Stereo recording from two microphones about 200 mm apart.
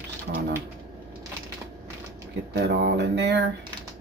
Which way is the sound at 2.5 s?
55° right (ahead or behind).